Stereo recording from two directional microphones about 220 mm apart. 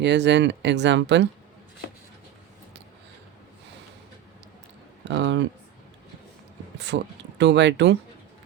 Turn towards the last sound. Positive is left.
turn(degrees=-55)  # may be behind; listen again after turning